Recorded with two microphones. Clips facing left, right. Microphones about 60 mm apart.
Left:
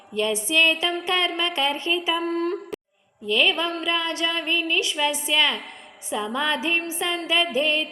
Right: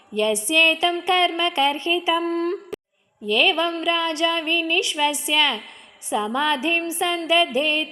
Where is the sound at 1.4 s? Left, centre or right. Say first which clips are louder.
Right 4 dB; right.